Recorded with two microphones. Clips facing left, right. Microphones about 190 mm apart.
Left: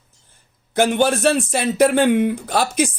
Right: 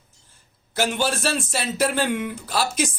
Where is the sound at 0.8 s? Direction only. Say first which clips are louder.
Left 7 dB; 55° left (ahead or behind).